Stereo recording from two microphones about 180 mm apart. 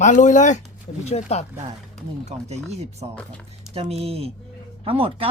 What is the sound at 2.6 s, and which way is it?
Speech, 35° right (ahead or behind).